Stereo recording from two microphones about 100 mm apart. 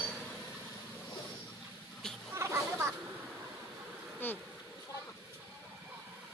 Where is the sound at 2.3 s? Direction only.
25° right (ahead or behind).